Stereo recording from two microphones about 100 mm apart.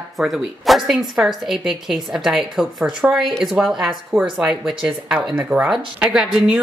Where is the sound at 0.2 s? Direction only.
Centre (ahead or behind).